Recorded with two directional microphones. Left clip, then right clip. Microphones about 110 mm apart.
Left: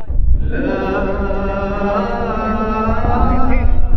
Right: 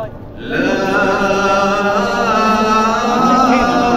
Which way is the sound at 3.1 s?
25° right (ahead or behind).